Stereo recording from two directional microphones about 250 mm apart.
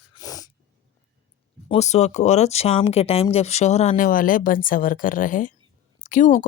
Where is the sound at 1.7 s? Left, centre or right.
Left.